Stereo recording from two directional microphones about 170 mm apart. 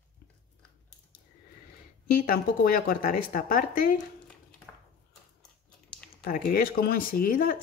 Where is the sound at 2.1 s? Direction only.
60° left (ahead or behind).